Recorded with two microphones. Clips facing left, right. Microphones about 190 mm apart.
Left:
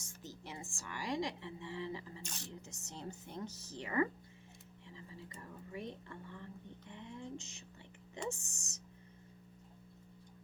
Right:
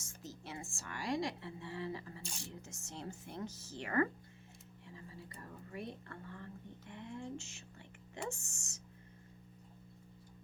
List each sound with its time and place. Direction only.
0.0 s a woman's voice: 15° left (ahead or behind)
2.2 s speech: 10° right (ahead or behind)
2.6 s speech: 15° left (ahead or behind)